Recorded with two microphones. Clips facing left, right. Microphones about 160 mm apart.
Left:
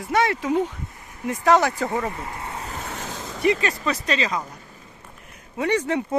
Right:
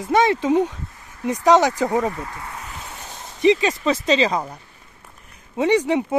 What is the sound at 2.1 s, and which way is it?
Vehicle, 25° left (ahead or behind).